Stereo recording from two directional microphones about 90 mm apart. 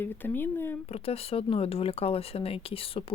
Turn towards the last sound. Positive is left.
turn(degrees=90)